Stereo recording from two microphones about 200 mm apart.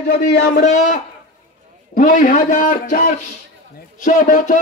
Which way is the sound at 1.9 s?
40° left (ahead or behind).